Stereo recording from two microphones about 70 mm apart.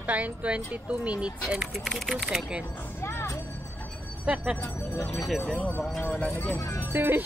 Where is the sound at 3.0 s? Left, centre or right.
Left.